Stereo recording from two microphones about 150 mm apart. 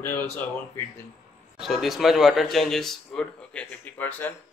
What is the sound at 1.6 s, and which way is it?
A man's voice, centre (ahead or behind).